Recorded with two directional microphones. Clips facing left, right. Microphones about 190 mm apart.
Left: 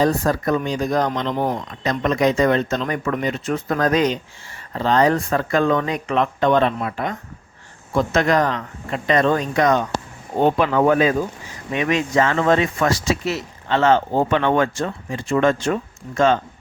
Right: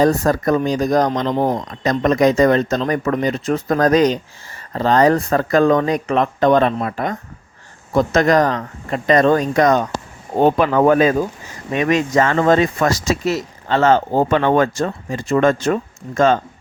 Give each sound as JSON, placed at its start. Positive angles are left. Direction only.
{"t": 0.0, "sound": "speech", "side_deg": -45}